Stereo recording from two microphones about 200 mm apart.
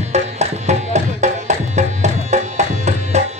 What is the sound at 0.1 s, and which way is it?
Tabla, 35° right (ahead or behind).